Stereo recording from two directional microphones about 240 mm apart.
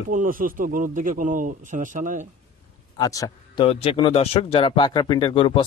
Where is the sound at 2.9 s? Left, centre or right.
Centre.